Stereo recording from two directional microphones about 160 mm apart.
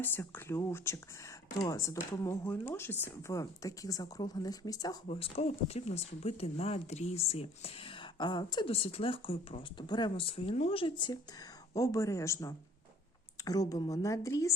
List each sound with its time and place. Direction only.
0.0 s speech: 15° left (ahead or behind)
5.0 s speech: 40° left (ahead or behind); by 14.5 s 20° left (ahead or behind)